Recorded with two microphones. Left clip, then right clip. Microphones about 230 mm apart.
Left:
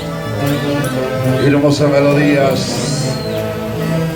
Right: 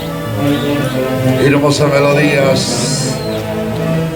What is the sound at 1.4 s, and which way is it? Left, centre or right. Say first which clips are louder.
A man's voice: even; right.